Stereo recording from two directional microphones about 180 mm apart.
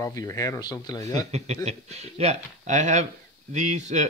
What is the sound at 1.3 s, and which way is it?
Speech, 35° right (ahead or behind).